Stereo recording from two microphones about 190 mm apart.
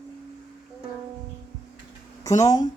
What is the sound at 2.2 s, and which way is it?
Speech, 20° left (ahead or behind).